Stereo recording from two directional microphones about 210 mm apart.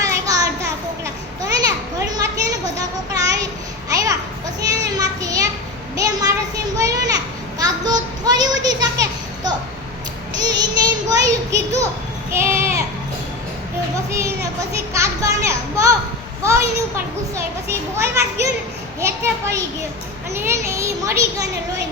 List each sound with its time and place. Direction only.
0.0 s a sound: 15° right (ahead or behind)
1.4 s children playing: 20° right (ahead or behind)
4.9 s children playing: 15° right (ahead or behind)
6.0 s child singing: 15° right (ahead or behind)
6.7 s children playing: 15° right (ahead or behind)
7.6 s child singing: 20° right (ahead or behind)
12.3 s a sound: 10° right (ahead or behind)
14.9 s a child's voice: 15° right (ahead or behind)